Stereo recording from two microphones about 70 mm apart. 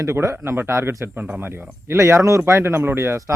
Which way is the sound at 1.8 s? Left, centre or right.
Right.